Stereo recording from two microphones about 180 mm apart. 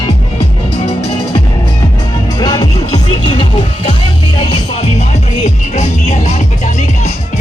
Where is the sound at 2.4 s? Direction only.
20° left (ahead or behind).